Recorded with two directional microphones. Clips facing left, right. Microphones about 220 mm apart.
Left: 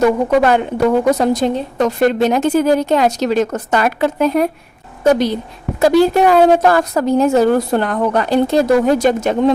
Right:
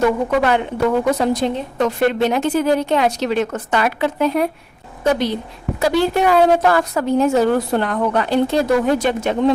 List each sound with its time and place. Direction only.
0.3 s a woman's voice: 45° left (ahead or behind)